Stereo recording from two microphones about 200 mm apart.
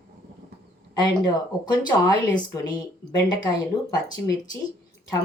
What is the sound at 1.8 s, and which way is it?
Speech, 20° left (ahead or behind).